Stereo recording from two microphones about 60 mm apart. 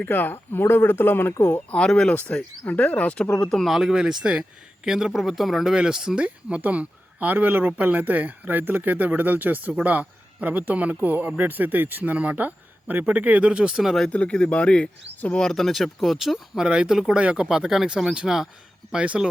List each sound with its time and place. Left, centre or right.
0.0 s speech: left
1.7 s speech: centre
2.3 s speech: left
3.2 s speech: centre
3.7 s speech: centre
6.2 s a man's voice: right
13.8 s speech: centre
14.1 s speech: centre
15.4 s speech: centre
17.2 s a man's voice: centre
17.5 s speech: centre